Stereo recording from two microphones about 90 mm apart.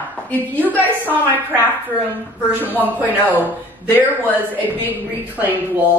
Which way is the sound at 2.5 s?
20° right (ahead or behind).